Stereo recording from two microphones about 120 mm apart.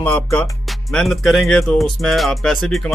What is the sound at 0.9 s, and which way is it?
Speech, centre (ahead or behind).